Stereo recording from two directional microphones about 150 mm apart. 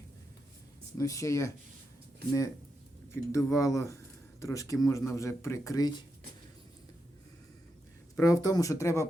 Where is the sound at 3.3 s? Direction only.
20° left (ahead or behind).